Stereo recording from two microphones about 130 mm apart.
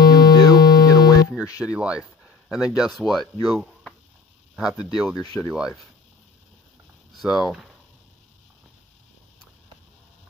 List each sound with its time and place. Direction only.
0.0 s music: 30° left (ahead or behind)
1.6 s speech: 10° right (ahead or behind)
7.2 s speech: centre (ahead or behind)